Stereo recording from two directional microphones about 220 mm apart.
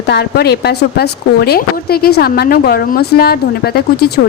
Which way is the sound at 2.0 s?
45° left (ahead or behind).